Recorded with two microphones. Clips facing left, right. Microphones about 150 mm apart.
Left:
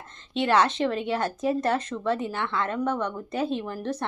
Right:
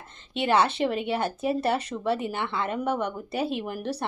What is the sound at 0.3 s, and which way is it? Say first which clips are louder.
A woman's voice: left 1 dB; 5° right (ahead or behind).